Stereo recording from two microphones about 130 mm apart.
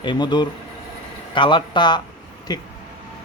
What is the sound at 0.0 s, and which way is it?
Speech, 35° left (ahead or behind).